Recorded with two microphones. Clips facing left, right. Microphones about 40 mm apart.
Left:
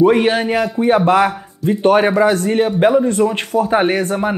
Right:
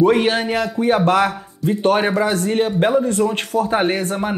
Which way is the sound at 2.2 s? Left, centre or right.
Left.